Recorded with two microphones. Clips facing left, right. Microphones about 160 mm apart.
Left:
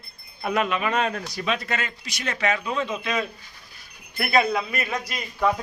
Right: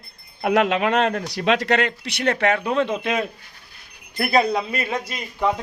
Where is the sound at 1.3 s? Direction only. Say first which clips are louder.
Right 8 dB; 80° right; by 3.3 s 55° right (ahead or behind).